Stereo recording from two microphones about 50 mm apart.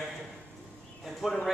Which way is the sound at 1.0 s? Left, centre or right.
Centre.